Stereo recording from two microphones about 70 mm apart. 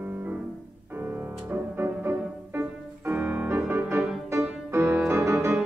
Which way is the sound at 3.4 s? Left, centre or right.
Right.